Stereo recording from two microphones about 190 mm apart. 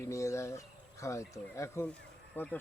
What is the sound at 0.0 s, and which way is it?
Speech, 15° left (ahead or behind).